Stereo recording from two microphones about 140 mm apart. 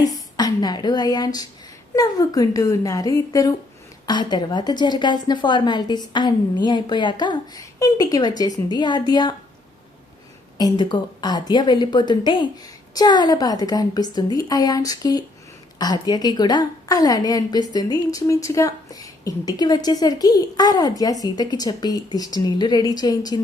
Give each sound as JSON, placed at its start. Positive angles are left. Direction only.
{"t": 0.0, "sound": "a woman's voice", "side_deg": 25}
{"t": 10.6, "sound": "a woman's voice", "side_deg": 30}